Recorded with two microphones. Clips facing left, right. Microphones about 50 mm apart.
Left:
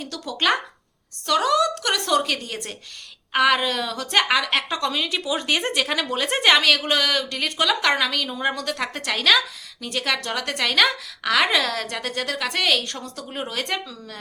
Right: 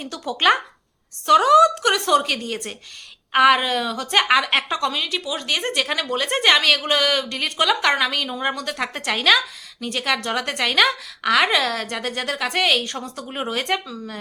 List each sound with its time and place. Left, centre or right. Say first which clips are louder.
0.0 s a woman's voice: right 4 dB; right
4.8 s a woman's voice: right 1 dB; centre